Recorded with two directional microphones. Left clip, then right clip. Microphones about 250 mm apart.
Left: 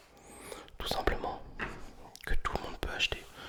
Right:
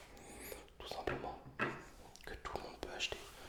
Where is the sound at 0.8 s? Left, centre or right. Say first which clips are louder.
Left 9 dB; left.